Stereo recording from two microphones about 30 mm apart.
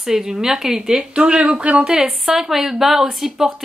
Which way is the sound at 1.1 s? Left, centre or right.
Right.